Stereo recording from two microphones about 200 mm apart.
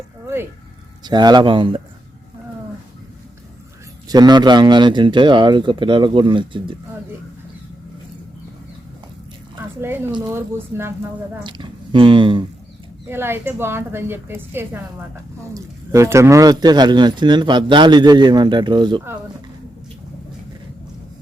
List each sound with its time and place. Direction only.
1.0 s a woman's voice: 20° right (ahead or behind)
4.1 s a woman's voice: 20° right (ahead or behind)
9.8 s speech: 10° right (ahead or behind)
11.4 s speech: 25° right (ahead or behind)
13.1 s a woman's voice: 10° right (ahead or behind)